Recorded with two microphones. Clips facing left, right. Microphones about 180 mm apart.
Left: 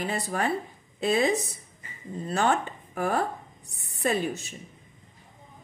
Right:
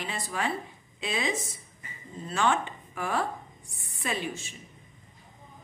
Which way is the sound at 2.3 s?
40° left (ahead or behind).